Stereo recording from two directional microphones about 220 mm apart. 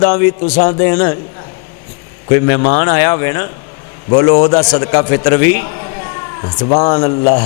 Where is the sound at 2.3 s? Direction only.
15° left (ahead or behind).